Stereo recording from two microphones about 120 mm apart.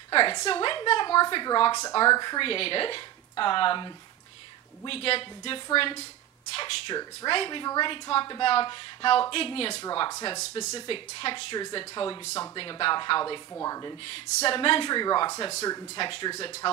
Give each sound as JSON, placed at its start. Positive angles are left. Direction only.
{"t": 0.1, "sound": "speech", "side_deg": 45}
{"t": 13.5, "sound": "speech", "side_deg": 25}
{"t": 14.0, "sound": "speech", "side_deg": 50}